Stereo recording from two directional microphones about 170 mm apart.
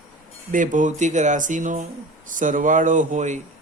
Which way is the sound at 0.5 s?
50° right (ahead or behind).